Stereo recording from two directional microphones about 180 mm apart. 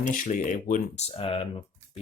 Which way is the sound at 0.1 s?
50° left (ahead or behind).